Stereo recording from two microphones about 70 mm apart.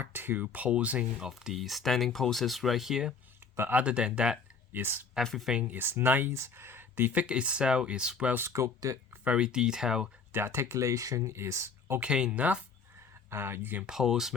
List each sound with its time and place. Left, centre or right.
0.0 s speech: right
1.3 s speech: centre
3.5 s speech: right
3.8 s speech: centre
4.7 s speech: right
5.1 s speech: centre
5.6 s speech: right
8.4 s speech: right
9.2 s speech: centre
10.3 s speech: right
11.9 s speech: centre
13.3 s speech: right
13.8 s speech: centre